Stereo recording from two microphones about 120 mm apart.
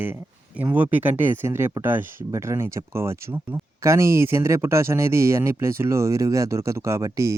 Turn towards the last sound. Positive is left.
turn(degrees=-25)  # may be behind; listen again after turning